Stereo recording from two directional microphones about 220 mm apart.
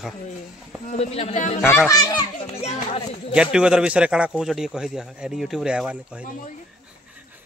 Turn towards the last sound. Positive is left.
turn(degrees=35)  # may be behind; listen again after turning